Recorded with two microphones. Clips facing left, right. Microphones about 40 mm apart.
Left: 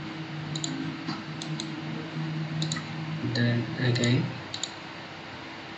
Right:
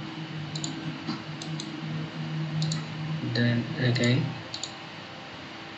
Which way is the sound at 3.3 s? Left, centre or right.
Centre.